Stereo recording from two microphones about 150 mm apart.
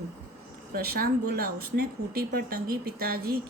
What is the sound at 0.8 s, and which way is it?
Speech, 90° right.